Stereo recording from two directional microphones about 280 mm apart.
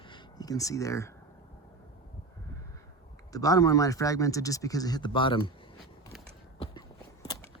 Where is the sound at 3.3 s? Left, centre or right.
Centre.